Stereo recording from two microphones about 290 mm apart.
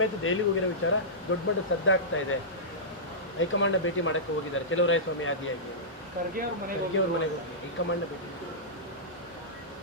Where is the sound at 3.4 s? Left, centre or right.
Left.